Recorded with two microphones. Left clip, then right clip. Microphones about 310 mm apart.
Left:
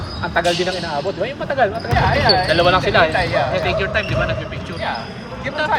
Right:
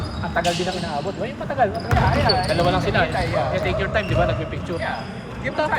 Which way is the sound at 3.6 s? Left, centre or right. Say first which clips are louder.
Left 3 dB; centre.